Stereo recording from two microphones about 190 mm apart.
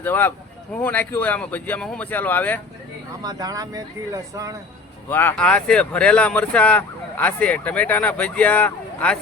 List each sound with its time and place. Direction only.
0.0 s speech: 10° left (ahead or behind)
3.2 s speech: 20° right (ahead or behind)
5.0 s speech: 10° left (ahead or behind)